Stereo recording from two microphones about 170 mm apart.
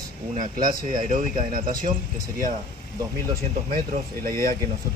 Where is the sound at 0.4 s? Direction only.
50° right (ahead or behind).